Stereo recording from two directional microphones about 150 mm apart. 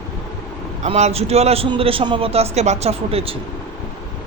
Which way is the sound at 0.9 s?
45° right (ahead or behind).